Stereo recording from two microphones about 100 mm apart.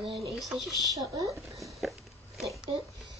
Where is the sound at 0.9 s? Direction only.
35° right (ahead or behind).